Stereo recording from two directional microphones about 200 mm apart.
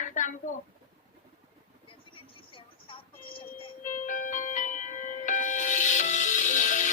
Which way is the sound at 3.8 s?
40° left (ahead or behind).